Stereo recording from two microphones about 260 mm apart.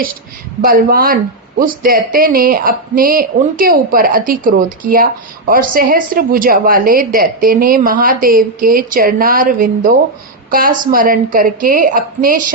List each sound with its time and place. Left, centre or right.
0.6 s a woman's voice: right